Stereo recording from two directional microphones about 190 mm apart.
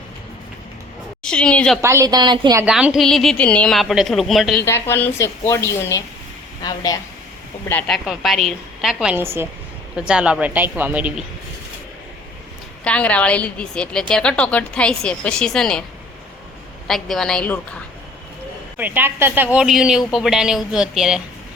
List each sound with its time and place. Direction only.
1.2 s a woman's voice: 5° left (ahead or behind)
1.8 s a woman's voice: 15° right (ahead or behind)
2.6 s a woman's voice: 5° right (ahead or behind)
4.6 s a woman's voice: 15° left (ahead or behind)
7.7 s a woman's voice: 5° left (ahead or behind)
12.8 s a woman's voice: 5° left (ahead or behind)
16.8 s a woman's voice: centre (ahead or behind)
18.8 s a woman's voice: 10° right (ahead or behind)